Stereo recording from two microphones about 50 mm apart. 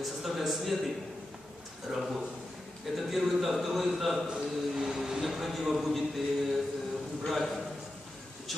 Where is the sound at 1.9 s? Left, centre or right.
Centre.